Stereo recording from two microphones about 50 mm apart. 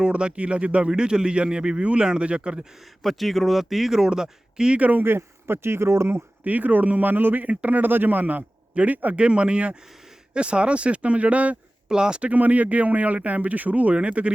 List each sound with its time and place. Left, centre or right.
0.0 s speech: centre
3.0 s speech: centre
4.8 s a man's voice: right
5.0 s speech: right
6.4 s a man's voice: right
11.9 s speech: centre
12.3 s speech: right